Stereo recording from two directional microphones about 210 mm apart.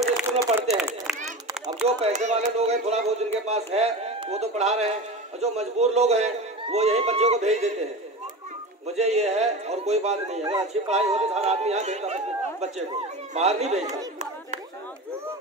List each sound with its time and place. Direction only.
0.0 s a sound: 5° right (ahead or behind)
0.7 s run: centre (ahead or behind)
2.0 s a man's voice: 30° right (ahead or behind)